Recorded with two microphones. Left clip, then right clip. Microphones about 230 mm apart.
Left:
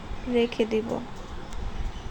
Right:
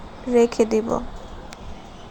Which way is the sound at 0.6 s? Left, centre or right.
Right.